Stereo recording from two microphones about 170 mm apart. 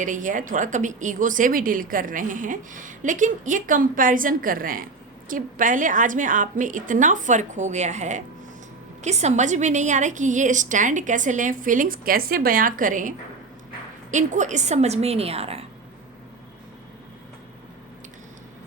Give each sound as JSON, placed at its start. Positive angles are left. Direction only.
{"t": 0.0, "sound": "a woman's voice", "side_deg": -50}